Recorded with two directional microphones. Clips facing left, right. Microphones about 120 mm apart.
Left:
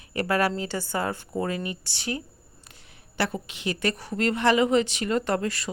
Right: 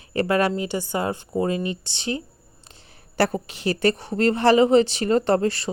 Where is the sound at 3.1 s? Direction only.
40° right (ahead or behind).